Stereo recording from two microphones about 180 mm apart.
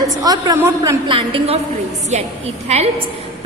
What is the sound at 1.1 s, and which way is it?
A woman's voice, 30° right (ahead or behind).